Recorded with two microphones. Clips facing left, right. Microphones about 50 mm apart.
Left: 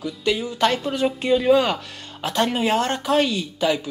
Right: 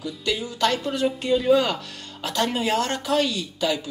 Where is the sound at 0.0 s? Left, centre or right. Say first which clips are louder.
Left 4 dB; left.